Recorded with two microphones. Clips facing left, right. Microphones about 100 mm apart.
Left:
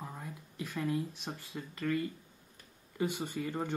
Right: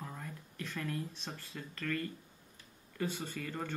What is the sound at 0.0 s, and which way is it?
Speech, 15° left (ahead or behind).